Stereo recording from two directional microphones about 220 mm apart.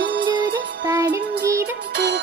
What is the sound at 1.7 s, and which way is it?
Music, 55° right (ahead or behind).